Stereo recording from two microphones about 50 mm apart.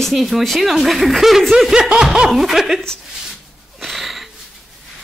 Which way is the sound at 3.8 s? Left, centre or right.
Centre.